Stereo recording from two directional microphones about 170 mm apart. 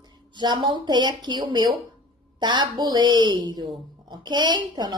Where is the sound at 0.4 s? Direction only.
25° right (ahead or behind).